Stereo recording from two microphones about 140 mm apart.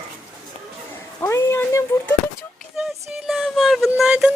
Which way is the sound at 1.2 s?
20° left (ahead or behind).